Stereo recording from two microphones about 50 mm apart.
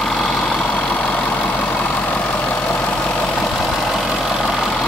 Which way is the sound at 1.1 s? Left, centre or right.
Left.